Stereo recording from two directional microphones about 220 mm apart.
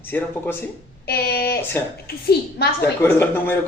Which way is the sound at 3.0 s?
10° left (ahead or behind).